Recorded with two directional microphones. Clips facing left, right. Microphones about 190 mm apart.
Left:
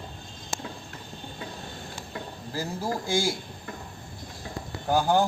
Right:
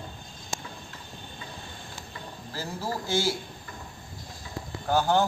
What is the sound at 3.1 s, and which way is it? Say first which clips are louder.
Speech: even; 10° left (ahead or behind).